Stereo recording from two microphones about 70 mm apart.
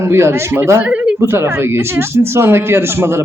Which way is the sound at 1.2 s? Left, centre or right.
Right.